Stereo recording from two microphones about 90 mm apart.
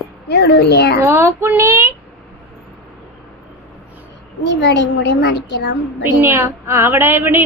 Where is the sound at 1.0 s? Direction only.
30° right (ahead or behind).